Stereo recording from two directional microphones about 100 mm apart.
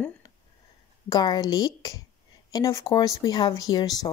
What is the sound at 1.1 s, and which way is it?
A woman's voice, 40° left (ahead or behind).